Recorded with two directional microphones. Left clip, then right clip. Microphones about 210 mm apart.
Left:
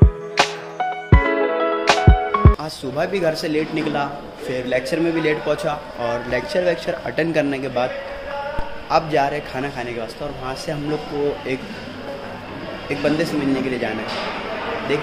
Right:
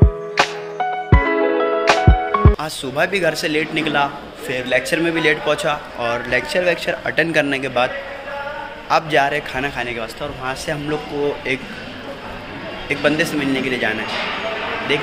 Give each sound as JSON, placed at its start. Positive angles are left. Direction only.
{"t": 0.4, "sound": "music", "side_deg": 5}
{"t": 2.6, "sound": "a man's voice", "side_deg": 5}
{"t": 12.8, "sound": "a man's voice", "side_deg": 5}